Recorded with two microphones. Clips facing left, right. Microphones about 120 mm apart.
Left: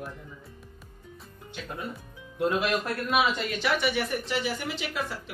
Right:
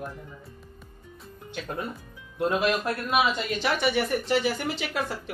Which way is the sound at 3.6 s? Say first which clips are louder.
Right 2 dB; 40° right (ahead or behind).